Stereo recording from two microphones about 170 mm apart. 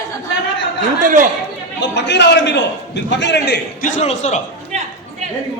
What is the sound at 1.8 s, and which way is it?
A man's voice, 90° left.